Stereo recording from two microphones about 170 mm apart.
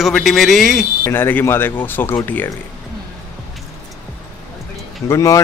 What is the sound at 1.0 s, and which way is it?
Speech, 15° left (ahead or behind).